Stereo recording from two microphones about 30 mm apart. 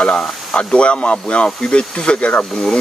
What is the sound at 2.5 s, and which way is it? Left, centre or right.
Speech, left.